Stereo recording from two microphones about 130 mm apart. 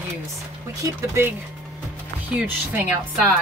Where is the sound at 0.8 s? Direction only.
20° right (ahead or behind).